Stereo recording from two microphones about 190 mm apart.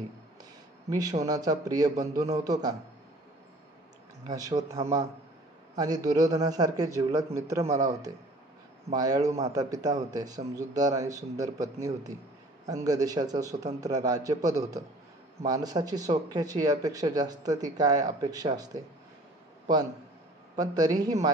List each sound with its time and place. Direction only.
0.8 s speech: 20° right (ahead or behind)
4.3 s speech: 20° right (ahead or behind)
5.8 s a man's voice: 20° right (ahead or behind)
8.9 s speech: 20° right (ahead or behind)
9.2 s a man's voice: 35° right (ahead or behind)
9.5 s a man's voice: 20° right (ahead or behind)
20.5 s speech: 20° right (ahead or behind)